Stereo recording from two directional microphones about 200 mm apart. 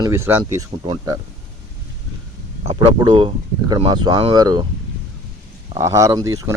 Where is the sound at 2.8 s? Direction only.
20° right (ahead or behind).